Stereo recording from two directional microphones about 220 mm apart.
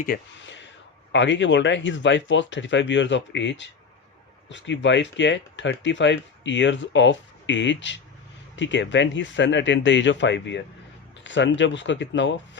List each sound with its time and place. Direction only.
0.1 s speech: 45° left (ahead or behind)